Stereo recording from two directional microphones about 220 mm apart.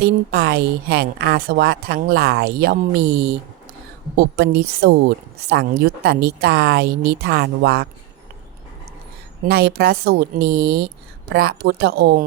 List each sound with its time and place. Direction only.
0.0 s a woman's voice: 50° right (ahead or behind)
9.5 s a woman's voice: 45° right (ahead or behind)